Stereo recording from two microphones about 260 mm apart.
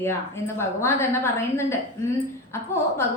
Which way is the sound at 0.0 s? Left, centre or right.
Centre.